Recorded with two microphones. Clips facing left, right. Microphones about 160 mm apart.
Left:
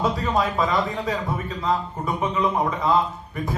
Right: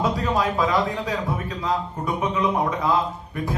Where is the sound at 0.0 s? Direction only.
Centre (ahead or behind).